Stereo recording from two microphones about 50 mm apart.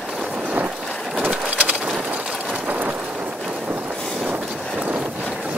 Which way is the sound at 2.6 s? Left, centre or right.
Right.